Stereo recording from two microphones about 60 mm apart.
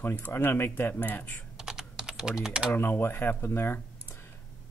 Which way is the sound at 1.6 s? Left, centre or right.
Centre.